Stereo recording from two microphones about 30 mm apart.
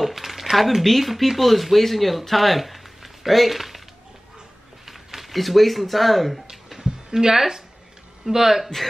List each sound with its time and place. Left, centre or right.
0.0 s speech: centre
4.8 s speech: centre
6.8 s a sound: centre
8.3 s a man's voice: centre